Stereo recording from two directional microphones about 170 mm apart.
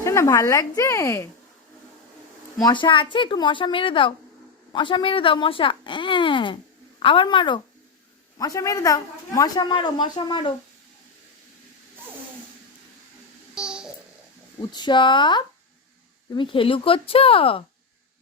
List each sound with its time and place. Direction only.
0.0 s a woman's voice: 15° left (ahead or behind)
2.6 s a woman's voice: 30° left (ahead or behind)
13.6 s babbling: 5° right (ahead or behind)
14.7 s a woman's voice: 25° left (ahead or behind)